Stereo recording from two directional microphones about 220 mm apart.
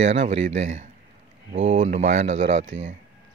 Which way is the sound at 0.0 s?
30° right (ahead or behind).